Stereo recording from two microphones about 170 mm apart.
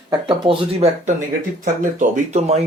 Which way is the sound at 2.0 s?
40° right (ahead or behind).